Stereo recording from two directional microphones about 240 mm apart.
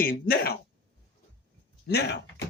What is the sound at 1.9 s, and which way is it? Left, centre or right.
Speech, left.